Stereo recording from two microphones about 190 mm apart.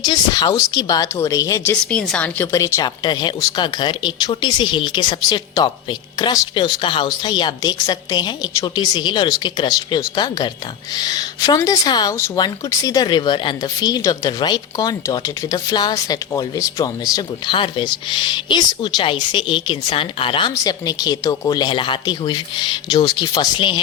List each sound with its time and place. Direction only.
0.0 s a woman's voice: 20° left (ahead or behind)